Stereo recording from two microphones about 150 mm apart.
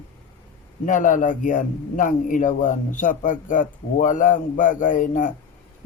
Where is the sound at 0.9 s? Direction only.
60° left (ahead or behind).